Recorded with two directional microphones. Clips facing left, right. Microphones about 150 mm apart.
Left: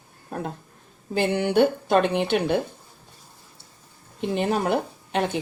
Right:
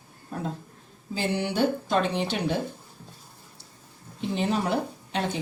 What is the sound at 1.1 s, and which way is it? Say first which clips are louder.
Speech: left 6 dB; 55° left (ahead or behind).